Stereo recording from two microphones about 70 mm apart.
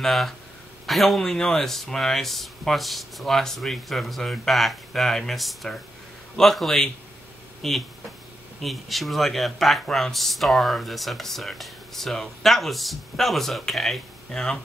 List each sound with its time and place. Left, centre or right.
0.0 s speech: centre